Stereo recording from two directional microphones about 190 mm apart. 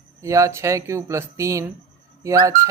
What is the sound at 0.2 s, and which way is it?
Speech, 15° right (ahead or behind).